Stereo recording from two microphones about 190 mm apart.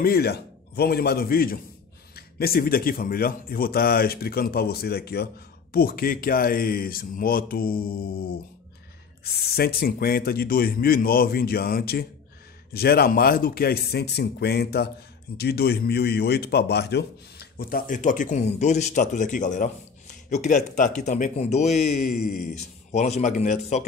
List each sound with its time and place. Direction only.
0.0 s a man's voice: 55° left (ahead or behind)
9.2 s a man's voice: 55° left (ahead or behind); by 21.9 s 35° left (ahead or behind)
22.1 s a man's voice: 50° left (ahead or behind)
22.5 s speech: 35° left (ahead or behind)